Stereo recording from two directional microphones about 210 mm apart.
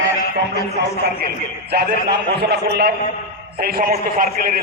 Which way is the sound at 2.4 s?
50° right (ahead or behind).